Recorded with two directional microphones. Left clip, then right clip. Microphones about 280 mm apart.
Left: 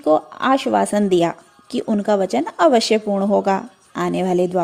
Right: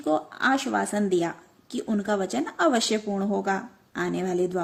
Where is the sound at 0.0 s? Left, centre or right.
Left.